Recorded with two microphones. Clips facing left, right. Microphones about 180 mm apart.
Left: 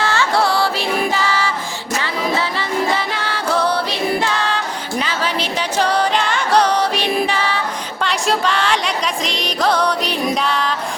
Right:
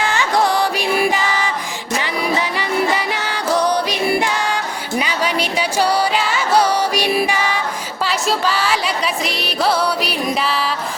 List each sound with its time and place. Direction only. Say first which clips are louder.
0.0 s music: even; 15° right (ahead or behind)